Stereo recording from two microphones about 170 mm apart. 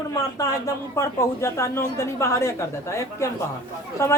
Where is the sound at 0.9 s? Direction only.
15° left (ahead or behind).